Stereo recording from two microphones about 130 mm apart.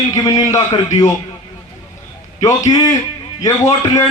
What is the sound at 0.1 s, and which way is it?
Speech, 25° left (ahead or behind).